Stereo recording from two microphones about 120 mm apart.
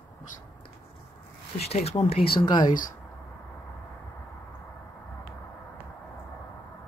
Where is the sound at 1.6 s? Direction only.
60° left (ahead or behind).